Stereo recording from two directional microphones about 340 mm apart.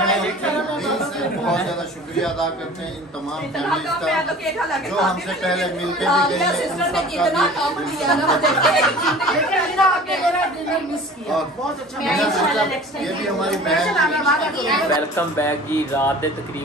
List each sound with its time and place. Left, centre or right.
0.0 s a sound: centre
3.5 s a woman's voice: centre
12.0 s a woman's voice: centre